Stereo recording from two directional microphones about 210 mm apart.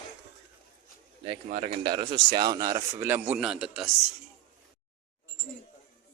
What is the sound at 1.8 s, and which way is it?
A man's voice, 20° right (ahead or behind).